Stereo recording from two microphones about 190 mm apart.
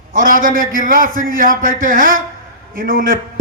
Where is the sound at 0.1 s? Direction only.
45° right (ahead or behind).